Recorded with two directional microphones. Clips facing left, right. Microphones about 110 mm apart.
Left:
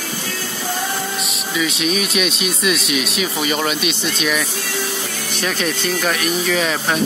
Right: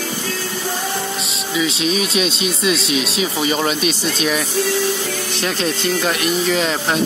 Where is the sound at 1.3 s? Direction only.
30° right (ahead or behind).